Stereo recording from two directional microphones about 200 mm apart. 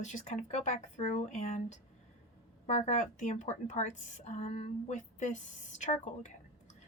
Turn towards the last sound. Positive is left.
turn(degrees=35)  # may be behind; listen again after turning